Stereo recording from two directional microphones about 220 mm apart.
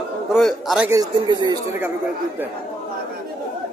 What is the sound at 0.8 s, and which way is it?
Speech, 15° right (ahead or behind).